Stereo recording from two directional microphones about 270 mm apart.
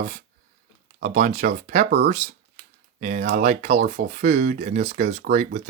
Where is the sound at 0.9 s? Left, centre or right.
Right.